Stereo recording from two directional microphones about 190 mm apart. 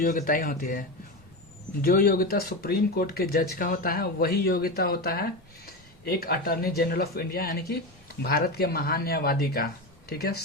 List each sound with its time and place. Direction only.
0.0 s speech: 45° left (ahead or behind)